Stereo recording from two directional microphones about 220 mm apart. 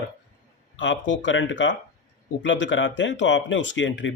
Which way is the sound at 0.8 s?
55° left (ahead or behind).